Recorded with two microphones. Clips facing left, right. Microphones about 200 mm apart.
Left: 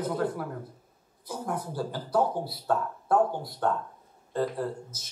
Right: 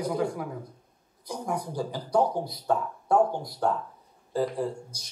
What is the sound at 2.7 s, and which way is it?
Speech, centre (ahead or behind).